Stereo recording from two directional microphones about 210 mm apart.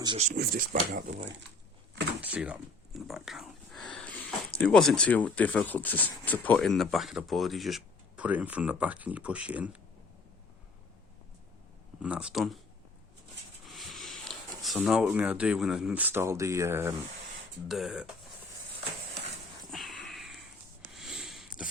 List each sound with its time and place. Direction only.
0.0 s speech: 25° right (ahead or behind)
0.3 s speech: 45° right (ahead or behind)
2.2 s speech: 5° right (ahead or behind)
12.0 s speech: 5° right (ahead or behind)
13.7 s speech: centre (ahead or behind)
17.7 s speech: centre (ahead or behind)
19.7 s a sound: centre (ahead or behind)